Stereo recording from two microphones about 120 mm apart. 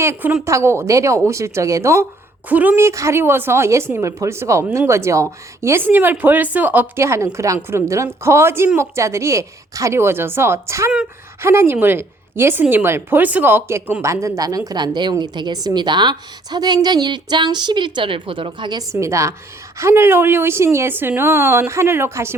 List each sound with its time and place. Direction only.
0.0 s a woman's voice: 20° right (ahead or behind)
2.5 s a woman's voice: 15° right (ahead or behind)